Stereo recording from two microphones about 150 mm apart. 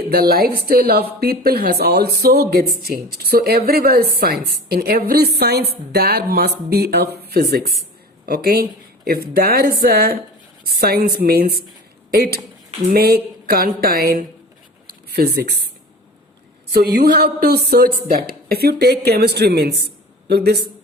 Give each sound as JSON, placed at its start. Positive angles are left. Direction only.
{"t": 0.1, "sound": "a woman's voice", "side_deg": -90}
{"t": 14.8, "sound": "a sound", "side_deg": -90}
{"t": 16.7, "sound": "a woman's voice", "side_deg": -90}